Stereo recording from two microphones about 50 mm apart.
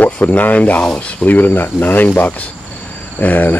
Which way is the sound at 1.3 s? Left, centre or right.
Left.